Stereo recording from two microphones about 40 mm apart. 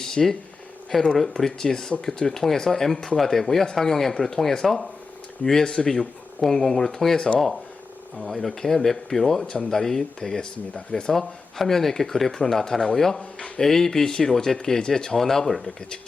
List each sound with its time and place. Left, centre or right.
0.0 s a sound: centre
0.9 s speech: centre
11.1 s speech: centre